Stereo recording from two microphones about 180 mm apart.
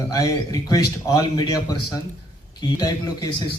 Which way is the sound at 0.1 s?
20° left (ahead or behind).